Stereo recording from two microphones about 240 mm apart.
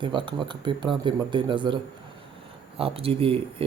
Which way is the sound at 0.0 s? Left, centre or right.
Centre.